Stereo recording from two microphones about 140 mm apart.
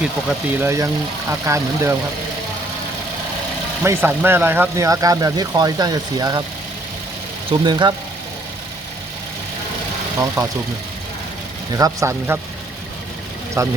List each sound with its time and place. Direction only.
0.6 s speech: 20° right (ahead or behind)
3.8 s speech: 15° right (ahead or behind)
7.5 s speech: 35° right (ahead or behind)
10.2 s speech: 20° right (ahead or behind)
11.7 s speech: 25° right (ahead or behind)
13.6 s speech: 20° right (ahead or behind)